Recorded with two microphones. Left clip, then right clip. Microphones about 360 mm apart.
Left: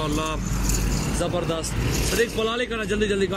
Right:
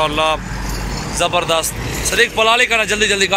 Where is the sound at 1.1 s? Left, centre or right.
Right.